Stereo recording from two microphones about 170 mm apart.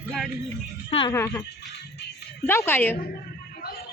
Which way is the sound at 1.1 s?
15° left (ahead or behind).